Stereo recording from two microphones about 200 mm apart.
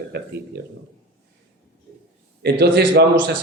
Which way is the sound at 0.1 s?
55° right (ahead or behind).